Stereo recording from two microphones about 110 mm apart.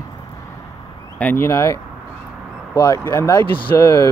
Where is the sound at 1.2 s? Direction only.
20° left (ahead or behind).